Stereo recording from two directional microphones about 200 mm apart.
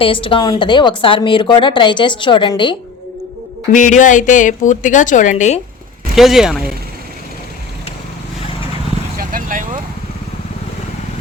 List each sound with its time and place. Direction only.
0.0 s a woman's voice: 25° left (ahead or behind)
3.7 s a woman's voice: 40° left (ahead or behind)
6.1 s speech: centre (ahead or behind)
9.1 s vehicle: 45° right (ahead or behind)